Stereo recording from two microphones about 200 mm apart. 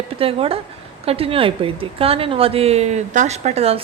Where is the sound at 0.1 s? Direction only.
30° right (ahead or behind).